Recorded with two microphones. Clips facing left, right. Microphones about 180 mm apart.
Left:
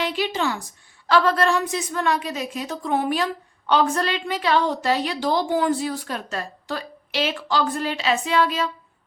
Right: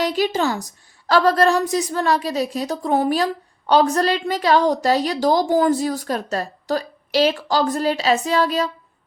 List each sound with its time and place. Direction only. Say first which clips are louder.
0.0 s a woman's voice: right 4 dB; 40° right (ahead or behind)